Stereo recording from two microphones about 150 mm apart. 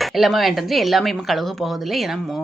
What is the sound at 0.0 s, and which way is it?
Speech, centre (ahead or behind).